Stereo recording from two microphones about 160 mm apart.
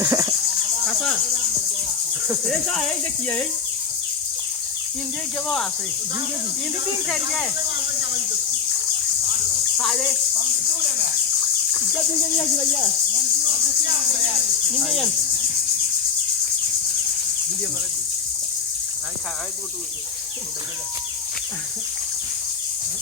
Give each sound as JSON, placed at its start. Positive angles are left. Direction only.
{"t": 0.0, "sound": "a sound", "side_deg": -20}
{"t": 2.5, "sound": "speech", "side_deg": 5}
{"t": 9.7, "sound": "speech", "side_deg": 5}
{"t": 14.8, "sound": "speech", "side_deg": 0}